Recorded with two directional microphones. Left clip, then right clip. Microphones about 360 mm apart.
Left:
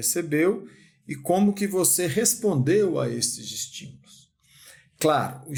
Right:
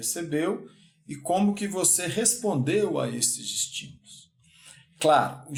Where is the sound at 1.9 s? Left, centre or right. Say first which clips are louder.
Left 3 dB; left.